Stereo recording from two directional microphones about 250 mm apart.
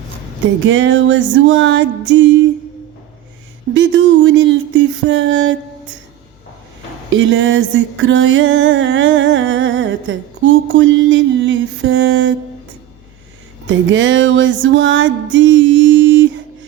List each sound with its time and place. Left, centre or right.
0.6 s music: right
3.8 s music: right
7.1 s music: right
13.7 s music: right